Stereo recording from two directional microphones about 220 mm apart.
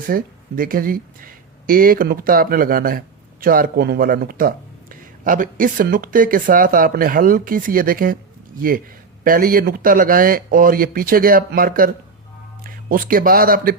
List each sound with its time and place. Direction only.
0.1 s speech: 40° right (ahead or behind)
9.2 s speech: 40° right (ahead or behind)